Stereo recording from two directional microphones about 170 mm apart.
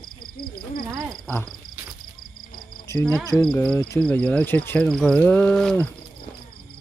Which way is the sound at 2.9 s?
15° left (ahead or behind).